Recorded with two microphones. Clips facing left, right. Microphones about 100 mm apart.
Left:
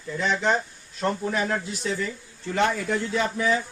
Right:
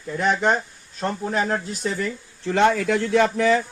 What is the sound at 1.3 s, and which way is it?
Speech, 40° right (ahead or behind).